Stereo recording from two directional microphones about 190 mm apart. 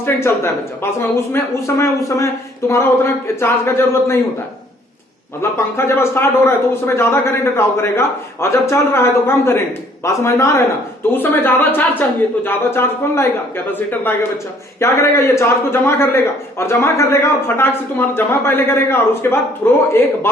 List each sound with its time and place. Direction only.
0.0 s speech: 15° left (ahead or behind)
5.4 s speech: 15° left (ahead or behind)
14.8 s speech: 15° left (ahead or behind)